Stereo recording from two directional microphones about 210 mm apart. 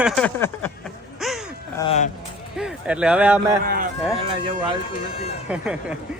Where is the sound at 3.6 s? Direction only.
45° right (ahead or behind).